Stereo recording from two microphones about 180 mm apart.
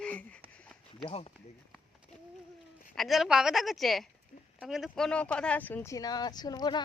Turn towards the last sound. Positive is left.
turn(degrees=25)  # may be behind; listen again after turning